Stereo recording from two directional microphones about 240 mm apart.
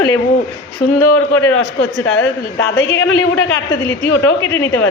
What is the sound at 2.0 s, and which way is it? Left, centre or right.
A man's voice, left.